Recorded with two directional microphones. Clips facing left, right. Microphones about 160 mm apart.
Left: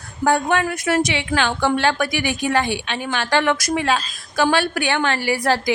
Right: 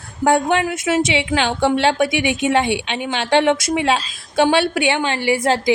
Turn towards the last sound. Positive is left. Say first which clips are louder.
# right 3 dB
turn(degrees=-20)  # may be behind; listen again after turning